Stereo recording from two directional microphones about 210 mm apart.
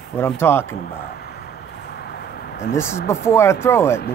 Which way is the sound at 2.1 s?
50° left (ahead or behind).